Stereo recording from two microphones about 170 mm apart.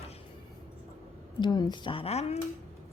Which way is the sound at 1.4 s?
25° left (ahead or behind).